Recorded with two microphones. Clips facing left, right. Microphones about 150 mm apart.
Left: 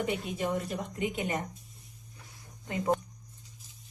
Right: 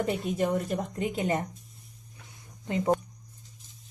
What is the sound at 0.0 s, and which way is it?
A woman's voice, 45° right (ahead or behind).